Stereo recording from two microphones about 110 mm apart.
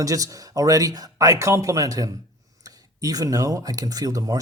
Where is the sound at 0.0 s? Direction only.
30° right (ahead or behind).